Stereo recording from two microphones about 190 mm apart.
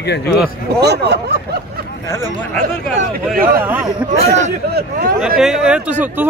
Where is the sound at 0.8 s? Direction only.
60° right (ahead or behind).